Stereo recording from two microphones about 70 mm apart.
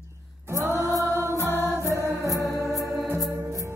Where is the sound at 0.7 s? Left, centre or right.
Left.